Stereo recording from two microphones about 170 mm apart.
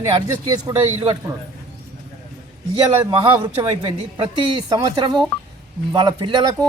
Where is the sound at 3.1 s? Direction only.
25° right (ahead or behind).